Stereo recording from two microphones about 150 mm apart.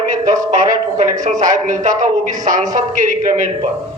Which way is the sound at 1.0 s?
50° right (ahead or behind).